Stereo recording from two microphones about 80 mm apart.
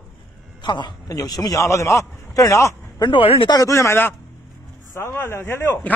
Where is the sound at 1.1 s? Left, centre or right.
Left.